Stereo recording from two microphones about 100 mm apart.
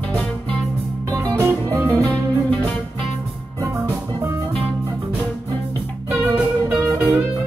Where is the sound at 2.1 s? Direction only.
15° left (ahead or behind).